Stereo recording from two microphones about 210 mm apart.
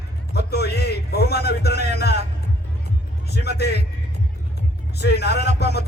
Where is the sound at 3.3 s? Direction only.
50° left (ahead or behind).